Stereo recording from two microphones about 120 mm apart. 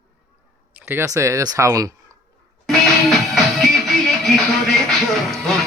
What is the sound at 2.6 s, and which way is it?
Music, 5° left (ahead or behind).